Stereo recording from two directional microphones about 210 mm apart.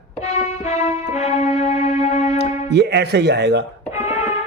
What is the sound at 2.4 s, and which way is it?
Speech, 55° right (ahead or behind).